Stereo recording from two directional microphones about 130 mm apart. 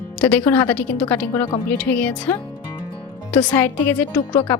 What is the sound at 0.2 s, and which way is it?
Speech, 10° left (ahead or behind).